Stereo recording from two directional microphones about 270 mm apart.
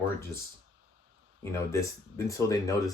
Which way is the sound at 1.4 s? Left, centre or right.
Centre.